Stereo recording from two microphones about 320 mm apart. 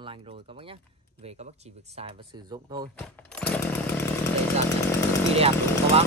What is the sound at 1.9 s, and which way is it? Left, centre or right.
Speech, centre.